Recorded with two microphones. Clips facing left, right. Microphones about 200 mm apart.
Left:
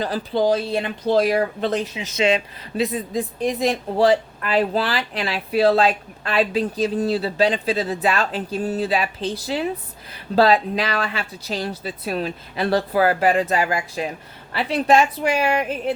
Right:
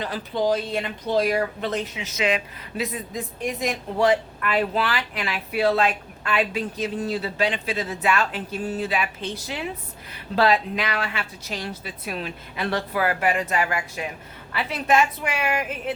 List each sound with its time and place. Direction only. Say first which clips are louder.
0.0 s speech: left 4 dB; 35° left (ahead or behind)